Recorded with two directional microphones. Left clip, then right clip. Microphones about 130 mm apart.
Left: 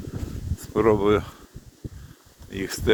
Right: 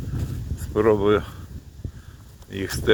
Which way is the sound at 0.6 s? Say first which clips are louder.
Right 1 dB; 20° left (ahead or behind).